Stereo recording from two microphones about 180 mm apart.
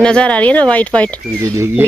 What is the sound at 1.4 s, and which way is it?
Speech, 15° right (ahead or behind).